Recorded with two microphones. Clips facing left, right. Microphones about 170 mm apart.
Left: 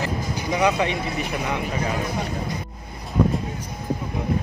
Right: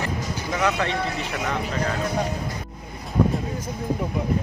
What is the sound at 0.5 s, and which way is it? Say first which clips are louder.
Speech: left 3 dB; 15° left (ahead or behind).